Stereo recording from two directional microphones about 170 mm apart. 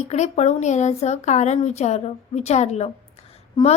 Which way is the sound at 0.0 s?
40° left (ahead or behind).